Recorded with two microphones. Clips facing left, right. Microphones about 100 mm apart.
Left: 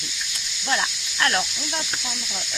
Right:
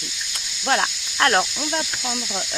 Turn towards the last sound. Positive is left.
turn(degrees=-45)  # may be behind; listen again after turning